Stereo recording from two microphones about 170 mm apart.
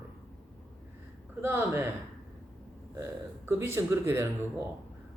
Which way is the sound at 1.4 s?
15° right (ahead or behind).